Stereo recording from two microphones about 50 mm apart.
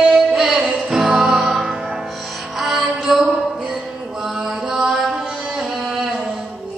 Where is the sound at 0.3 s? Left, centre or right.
Centre.